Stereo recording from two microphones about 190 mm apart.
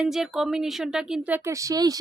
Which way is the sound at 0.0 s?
Centre (ahead or behind).